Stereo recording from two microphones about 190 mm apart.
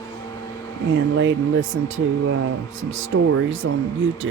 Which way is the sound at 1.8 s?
90° right.